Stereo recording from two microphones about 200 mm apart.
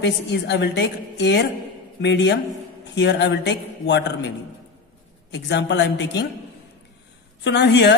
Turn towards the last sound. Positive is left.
turn(degrees=60)  # may be behind; listen again after turning